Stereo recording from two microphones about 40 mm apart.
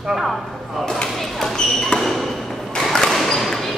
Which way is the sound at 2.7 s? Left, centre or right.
Centre.